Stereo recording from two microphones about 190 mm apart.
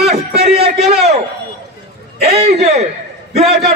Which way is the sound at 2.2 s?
35° right (ahead or behind).